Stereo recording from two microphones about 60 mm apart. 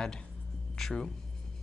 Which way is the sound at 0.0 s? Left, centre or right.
Centre.